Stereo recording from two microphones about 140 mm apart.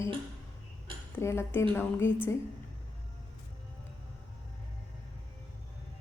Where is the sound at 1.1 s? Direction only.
20° left (ahead or behind).